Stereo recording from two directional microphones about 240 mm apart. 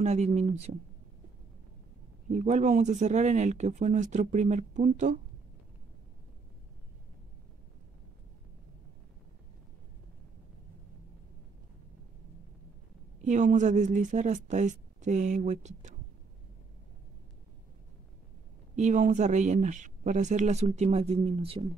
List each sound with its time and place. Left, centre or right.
0.0 s speech: right
2.3 s a woman's voice: right
13.2 s a woman's voice: right
18.8 s speech: right